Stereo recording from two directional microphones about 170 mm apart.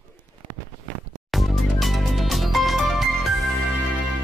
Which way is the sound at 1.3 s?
Centre (ahead or behind).